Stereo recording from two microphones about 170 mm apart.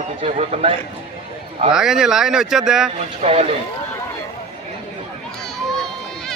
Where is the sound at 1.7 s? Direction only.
5° right (ahead or behind).